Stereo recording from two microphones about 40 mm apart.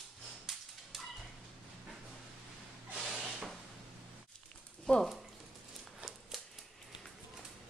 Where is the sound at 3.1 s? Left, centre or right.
Centre.